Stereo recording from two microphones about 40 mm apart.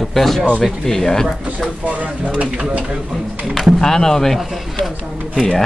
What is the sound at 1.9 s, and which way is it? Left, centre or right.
Speech, right.